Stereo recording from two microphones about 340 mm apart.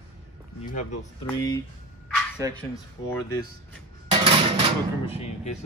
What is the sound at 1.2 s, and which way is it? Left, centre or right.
Speech, centre.